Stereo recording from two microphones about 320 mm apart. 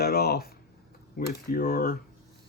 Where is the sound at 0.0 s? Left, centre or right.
Left.